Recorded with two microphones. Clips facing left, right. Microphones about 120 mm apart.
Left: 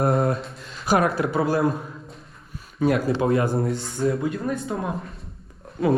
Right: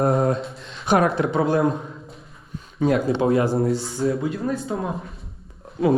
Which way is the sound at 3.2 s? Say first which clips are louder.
Right 2 dB; 25° right (ahead or behind).